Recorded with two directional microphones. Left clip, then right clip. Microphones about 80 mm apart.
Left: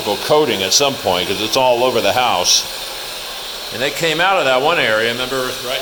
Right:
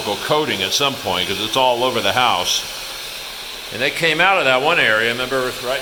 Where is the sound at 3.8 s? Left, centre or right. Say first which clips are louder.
Even; centre.